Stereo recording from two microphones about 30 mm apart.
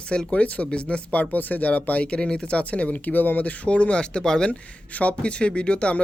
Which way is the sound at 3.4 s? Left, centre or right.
Left.